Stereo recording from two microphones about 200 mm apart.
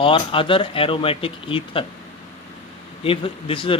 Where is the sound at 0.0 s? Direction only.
25° left (ahead or behind).